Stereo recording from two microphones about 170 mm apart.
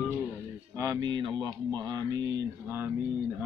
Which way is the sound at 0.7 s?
20° right (ahead or behind).